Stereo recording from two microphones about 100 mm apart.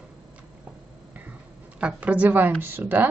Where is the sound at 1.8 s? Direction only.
15° right (ahead or behind).